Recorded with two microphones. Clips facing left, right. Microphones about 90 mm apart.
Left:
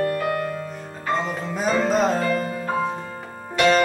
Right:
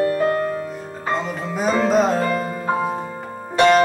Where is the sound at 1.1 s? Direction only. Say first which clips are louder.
Even; centre (ahead or behind).